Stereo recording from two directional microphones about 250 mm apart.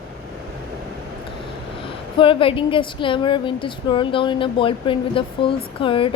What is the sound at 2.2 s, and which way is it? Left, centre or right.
Speech, left.